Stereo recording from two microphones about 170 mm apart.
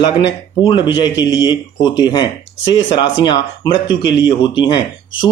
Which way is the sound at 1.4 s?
25° left (ahead or behind).